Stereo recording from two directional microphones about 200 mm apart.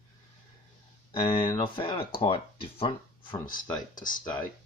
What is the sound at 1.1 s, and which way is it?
Speech, 25° left (ahead or behind).